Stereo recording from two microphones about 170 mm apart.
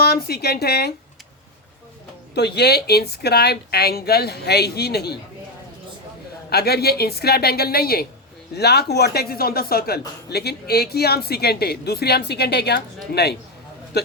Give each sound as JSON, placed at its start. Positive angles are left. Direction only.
{"t": 0.0, "sound": "speech", "side_deg": 65}
{"t": 2.3, "sound": "speech", "side_deg": 75}
{"t": 6.5, "sound": "speech", "side_deg": 70}